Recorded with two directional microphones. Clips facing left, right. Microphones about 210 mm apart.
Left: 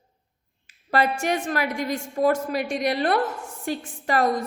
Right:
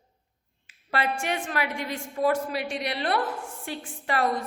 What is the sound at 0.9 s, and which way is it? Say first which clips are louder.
A woman's voice: left 5 dB; 40° left (ahead or behind).